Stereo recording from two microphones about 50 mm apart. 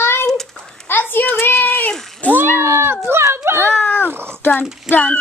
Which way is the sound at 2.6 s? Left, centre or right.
Right.